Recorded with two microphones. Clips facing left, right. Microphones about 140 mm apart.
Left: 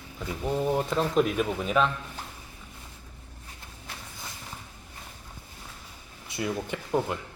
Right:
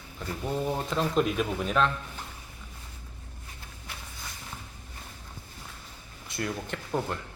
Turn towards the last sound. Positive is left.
turn(degrees=10)  # may be behind; listen again after turning